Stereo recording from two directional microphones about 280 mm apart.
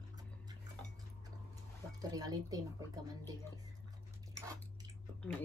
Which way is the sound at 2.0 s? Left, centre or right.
Centre.